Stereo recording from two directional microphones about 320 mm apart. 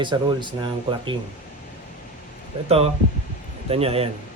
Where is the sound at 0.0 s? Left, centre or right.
Centre.